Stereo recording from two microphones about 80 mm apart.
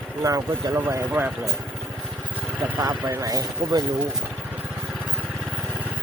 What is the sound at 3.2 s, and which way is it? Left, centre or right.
Speech, right.